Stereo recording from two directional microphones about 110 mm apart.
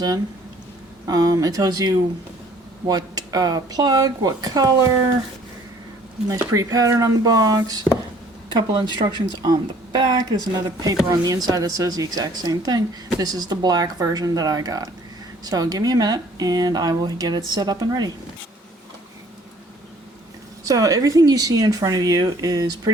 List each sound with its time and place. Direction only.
1.0 s speech: 35° right (ahead or behind)
6.5 s speech: 35° right (ahead or behind)
9.0 s speech: 40° right (ahead or behind)
20.7 s speech: 35° right (ahead or behind)